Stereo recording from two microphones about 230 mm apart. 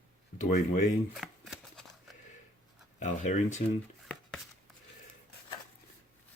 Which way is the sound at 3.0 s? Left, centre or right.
Left.